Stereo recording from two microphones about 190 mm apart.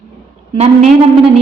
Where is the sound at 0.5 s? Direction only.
35° right (ahead or behind).